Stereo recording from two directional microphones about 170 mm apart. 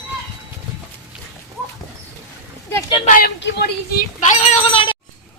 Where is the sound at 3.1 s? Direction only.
60° left (ahead or behind).